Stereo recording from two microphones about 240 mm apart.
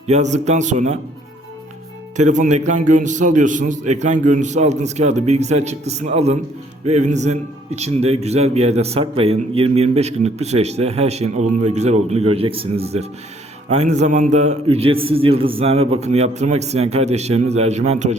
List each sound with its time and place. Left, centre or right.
0.1 s a man's voice: right
2.1 s a man's voice: right